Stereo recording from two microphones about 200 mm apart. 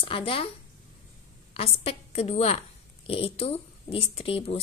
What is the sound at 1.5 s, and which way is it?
A woman's voice, 30° left (ahead or behind).